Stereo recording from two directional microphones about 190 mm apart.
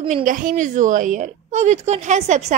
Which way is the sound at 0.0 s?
40° right (ahead or behind).